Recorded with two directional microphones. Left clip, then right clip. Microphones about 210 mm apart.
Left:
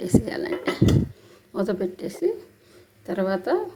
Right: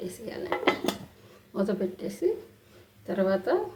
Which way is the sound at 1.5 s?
30° left (ahead or behind).